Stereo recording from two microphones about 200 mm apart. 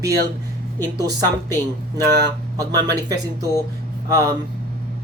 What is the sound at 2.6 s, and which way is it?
Speech, 20° right (ahead or behind).